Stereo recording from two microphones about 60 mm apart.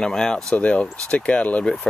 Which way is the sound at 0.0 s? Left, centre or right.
Centre.